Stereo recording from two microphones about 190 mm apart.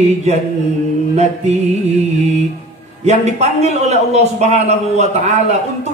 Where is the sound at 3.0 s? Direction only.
35° right (ahead or behind).